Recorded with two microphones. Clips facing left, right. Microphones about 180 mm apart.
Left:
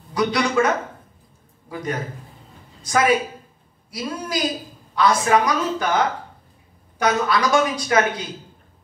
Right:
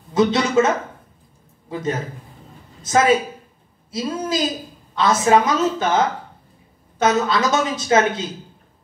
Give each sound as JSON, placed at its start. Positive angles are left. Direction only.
{"t": 0.1, "sound": "a woman's voice", "side_deg": -25}